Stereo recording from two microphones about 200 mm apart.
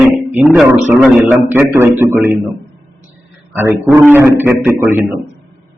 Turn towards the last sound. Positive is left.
turn(degrees=-10)  # may be behind; listen again after turning